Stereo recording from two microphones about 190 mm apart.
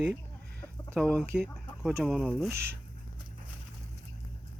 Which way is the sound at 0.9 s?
5° left (ahead or behind).